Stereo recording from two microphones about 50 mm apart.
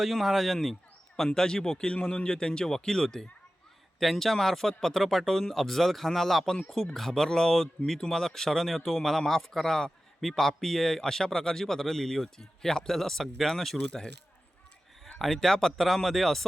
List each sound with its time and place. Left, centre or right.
0.0 s speech: centre
15.2 s speech: centre